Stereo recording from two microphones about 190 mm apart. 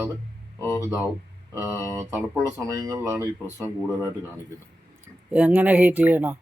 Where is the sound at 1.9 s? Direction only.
15° right (ahead or behind).